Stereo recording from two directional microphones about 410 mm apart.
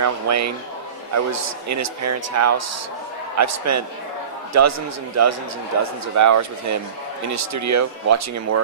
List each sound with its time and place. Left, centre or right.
0.0 s speech: right